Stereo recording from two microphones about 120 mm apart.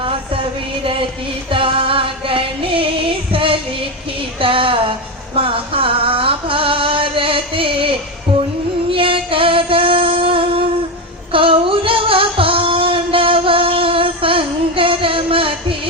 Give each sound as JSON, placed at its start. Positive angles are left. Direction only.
{"t": 1.5, "sound": "music", "side_deg": -50}
{"t": 11.3, "sound": "female singing", "side_deg": -50}